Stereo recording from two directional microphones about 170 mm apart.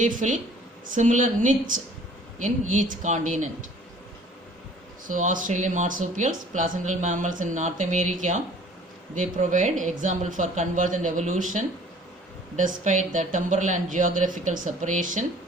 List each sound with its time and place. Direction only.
0.0 s speech: 50° right (ahead or behind)
5.0 s speech: 50° right (ahead or behind)